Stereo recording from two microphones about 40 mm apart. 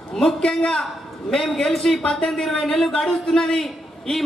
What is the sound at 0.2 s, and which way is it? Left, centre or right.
Speech, left.